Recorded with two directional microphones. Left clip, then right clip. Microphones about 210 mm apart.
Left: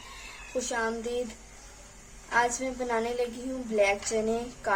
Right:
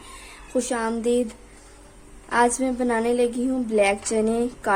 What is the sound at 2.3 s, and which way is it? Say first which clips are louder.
A woman's voice: right 6 dB; 50° right (ahead or behind).